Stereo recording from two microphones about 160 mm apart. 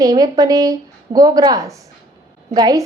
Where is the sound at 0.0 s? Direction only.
25° right (ahead or behind).